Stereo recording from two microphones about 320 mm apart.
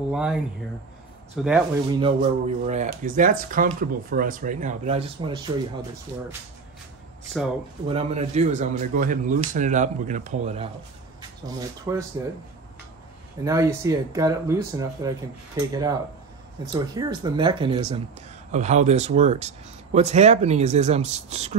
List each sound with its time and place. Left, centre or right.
0.1 s a man's voice: centre
2.0 s speech: centre
7.9 s speech: centre
13.4 s speech: centre